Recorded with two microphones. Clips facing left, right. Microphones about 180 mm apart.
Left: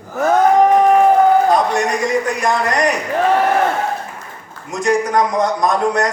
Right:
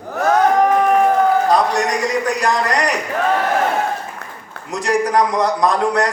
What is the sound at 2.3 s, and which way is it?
Speech, 35° right (ahead or behind).